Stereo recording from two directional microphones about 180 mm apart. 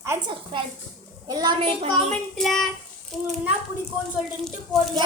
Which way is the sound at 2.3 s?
Centre (ahead or behind).